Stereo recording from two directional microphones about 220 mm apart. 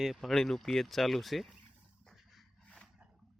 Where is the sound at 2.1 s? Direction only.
5° left (ahead or behind).